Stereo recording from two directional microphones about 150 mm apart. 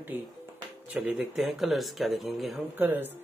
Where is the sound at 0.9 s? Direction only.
Centre (ahead or behind).